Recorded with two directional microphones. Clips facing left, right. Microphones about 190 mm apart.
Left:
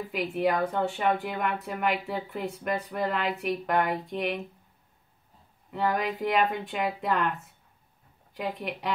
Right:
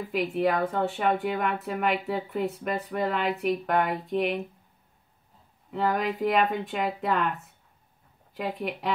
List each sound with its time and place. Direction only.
0.1 s speech: centre (ahead or behind)
5.7 s speech: centre (ahead or behind)